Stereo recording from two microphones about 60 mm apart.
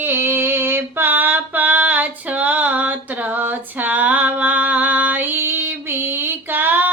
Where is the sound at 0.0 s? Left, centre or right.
Right.